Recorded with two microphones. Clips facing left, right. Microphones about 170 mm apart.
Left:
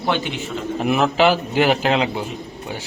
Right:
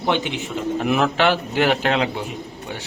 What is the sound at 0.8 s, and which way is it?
A man's voice, centre (ahead or behind).